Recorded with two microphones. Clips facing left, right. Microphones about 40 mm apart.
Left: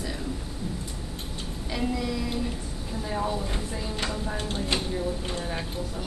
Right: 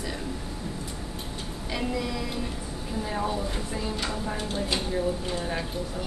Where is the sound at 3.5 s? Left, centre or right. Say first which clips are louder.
Right 1 dB; centre.